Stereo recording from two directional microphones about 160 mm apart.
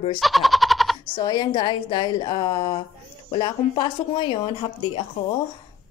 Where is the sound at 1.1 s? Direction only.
25° left (ahead or behind).